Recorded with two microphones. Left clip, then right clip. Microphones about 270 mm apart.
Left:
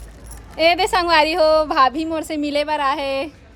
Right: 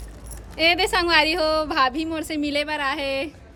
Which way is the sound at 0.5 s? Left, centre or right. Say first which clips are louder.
Left 4 dB; centre.